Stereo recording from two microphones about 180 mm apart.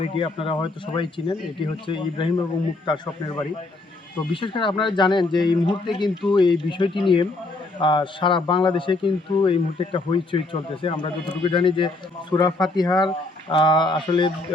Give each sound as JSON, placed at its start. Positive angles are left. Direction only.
{"t": 0.0, "sound": "a man's voice", "side_deg": 30}